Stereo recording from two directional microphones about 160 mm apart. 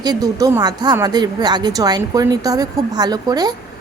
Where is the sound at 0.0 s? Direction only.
25° right (ahead or behind).